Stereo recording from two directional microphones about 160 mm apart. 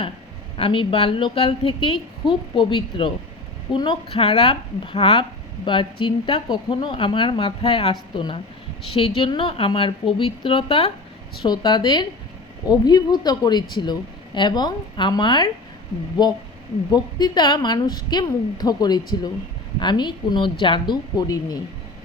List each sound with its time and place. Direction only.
0.5 s a woman's voice: 35° left (ahead or behind)